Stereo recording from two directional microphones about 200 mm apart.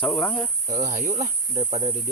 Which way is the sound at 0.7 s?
40° right (ahead or behind).